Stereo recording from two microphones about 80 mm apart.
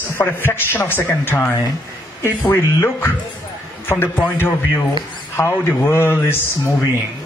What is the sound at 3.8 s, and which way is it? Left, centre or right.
Speech, left.